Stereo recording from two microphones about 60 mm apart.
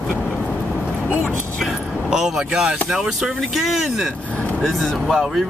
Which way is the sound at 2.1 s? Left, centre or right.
Centre.